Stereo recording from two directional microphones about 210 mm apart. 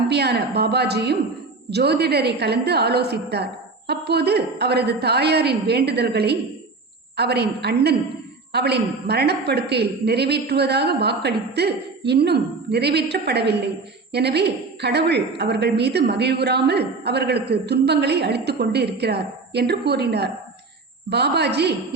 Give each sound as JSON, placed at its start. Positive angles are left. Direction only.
{"t": 0.1, "sound": "a woman's voice", "side_deg": -50}